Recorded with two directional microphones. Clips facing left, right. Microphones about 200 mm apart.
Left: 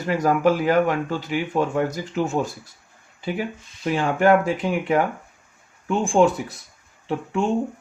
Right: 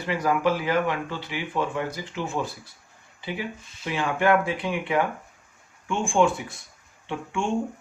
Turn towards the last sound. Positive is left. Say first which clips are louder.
# left 5 dB
turn(degrees=35)  # may be behind; listen again after turning